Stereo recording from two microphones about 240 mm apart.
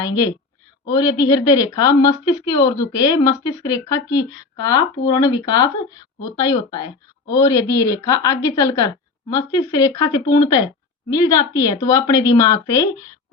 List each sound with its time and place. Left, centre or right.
0.0 s speech: centre